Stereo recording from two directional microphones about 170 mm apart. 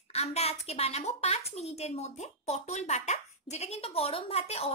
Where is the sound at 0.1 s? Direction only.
35° left (ahead or behind).